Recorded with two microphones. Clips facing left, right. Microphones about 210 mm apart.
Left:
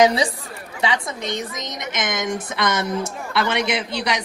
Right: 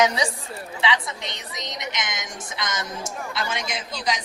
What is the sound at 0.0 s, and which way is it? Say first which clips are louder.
Speech: left 5 dB; 30° left (ahead or behind).